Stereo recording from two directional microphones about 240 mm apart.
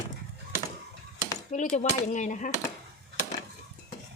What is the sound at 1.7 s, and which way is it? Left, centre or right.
Speech, left.